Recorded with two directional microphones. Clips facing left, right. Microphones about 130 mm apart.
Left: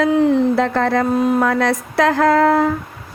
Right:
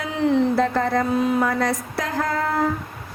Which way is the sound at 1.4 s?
85° left.